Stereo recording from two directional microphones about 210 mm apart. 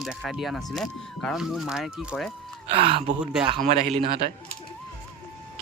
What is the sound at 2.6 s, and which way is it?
A man's voice, 25° right (ahead or behind).